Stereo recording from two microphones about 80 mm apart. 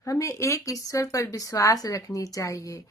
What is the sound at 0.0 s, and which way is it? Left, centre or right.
Speech, left.